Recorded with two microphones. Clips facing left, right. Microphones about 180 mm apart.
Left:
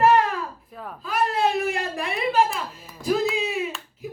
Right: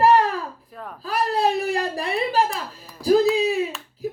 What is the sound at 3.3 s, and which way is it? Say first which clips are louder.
Clapping: right 7 dB; 35° right (ahead or behind).